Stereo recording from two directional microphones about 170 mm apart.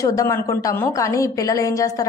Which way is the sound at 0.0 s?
20° left (ahead or behind).